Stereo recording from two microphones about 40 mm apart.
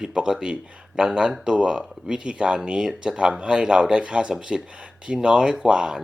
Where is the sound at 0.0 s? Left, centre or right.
Centre.